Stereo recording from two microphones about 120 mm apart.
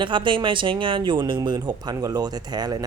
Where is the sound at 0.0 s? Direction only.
45° right (ahead or behind).